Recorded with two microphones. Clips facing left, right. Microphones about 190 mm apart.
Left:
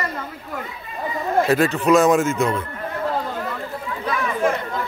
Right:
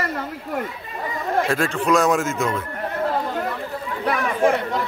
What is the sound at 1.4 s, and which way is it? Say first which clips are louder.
A man's voice: left 6 dB; 5° left (ahead or behind).